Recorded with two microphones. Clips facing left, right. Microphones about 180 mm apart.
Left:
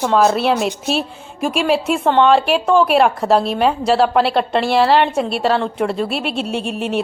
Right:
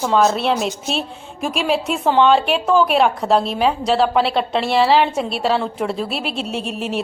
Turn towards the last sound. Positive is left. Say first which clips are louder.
# left 3 dB
turn(degrees=0)  # may be behind; listen again after turning